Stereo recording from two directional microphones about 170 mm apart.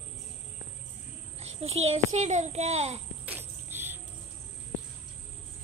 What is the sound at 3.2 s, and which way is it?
Cricket, 10° right (ahead or behind).